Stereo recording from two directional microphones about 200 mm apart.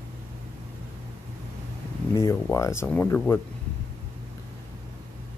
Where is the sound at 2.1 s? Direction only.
15° left (ahead or behind).